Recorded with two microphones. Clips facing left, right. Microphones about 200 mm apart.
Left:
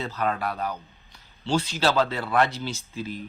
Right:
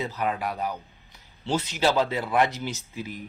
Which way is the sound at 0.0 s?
15° right (ahead or behind).